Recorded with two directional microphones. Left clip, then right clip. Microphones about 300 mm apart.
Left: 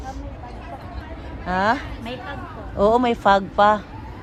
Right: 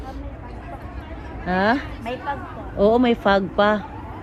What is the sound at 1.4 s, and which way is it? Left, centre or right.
Speech, centre.